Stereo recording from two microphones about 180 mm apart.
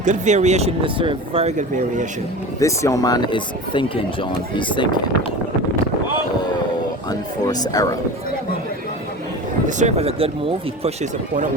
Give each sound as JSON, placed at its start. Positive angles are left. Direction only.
{"t": 0.0, "sound": "speech", "side_deg": -40}
{"t": 2.6, "sound": "speech", "side_deg": 15}
{"t": 7.1, "sound": "speech", "side_deg": 20}
{"t": 9.6, "sound": "speech", "side_deg": -40}